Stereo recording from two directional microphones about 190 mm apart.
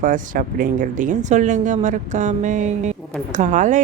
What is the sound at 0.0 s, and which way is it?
Speech, 45° right (ahead or behind).